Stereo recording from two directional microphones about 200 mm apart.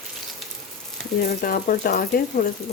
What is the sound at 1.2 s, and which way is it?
Speech, 50° left (ahead or behind).